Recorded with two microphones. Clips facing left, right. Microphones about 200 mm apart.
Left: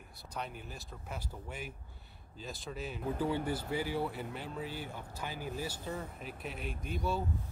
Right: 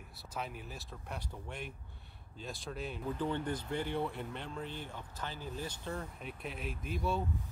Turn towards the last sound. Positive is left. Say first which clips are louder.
# even
turn(degrees=0)  # may be behind; listen again after turning